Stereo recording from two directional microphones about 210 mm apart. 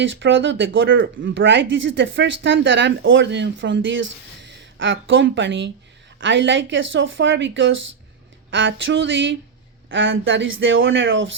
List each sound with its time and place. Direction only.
0.0 s speech: 60° right (ahead or behind)